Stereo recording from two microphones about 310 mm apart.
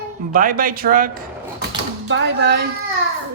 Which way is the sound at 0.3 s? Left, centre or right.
Right.